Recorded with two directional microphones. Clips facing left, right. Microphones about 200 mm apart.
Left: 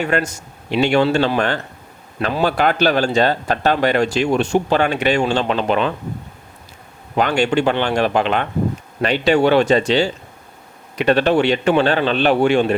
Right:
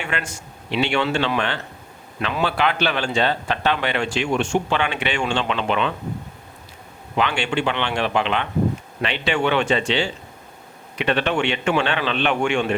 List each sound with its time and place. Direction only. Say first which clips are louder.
0.0 s speech: left 9 dB; 40° left (ahead or behind)
7.2 s speech: left 6 dB; 45° left (ahead or behind)